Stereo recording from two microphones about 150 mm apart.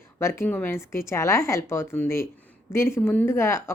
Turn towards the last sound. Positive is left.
turn(degrees=15)  # may be behind; listen again after turning